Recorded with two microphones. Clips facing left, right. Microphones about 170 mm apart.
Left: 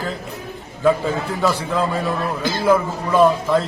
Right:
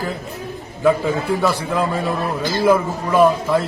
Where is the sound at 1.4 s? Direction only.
15° right (ahead or behind).